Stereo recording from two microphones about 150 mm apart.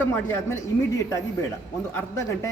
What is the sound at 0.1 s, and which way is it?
Speech, 15° left (ahead or behind).